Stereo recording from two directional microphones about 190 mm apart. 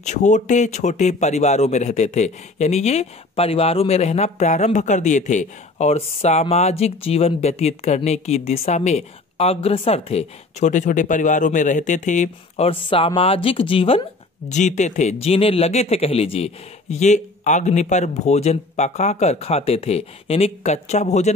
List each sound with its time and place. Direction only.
0.0 s speech: 40° left (ahead or behind)